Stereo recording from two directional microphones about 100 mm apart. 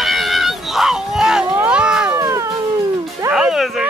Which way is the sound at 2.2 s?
30° right (ahead or behind).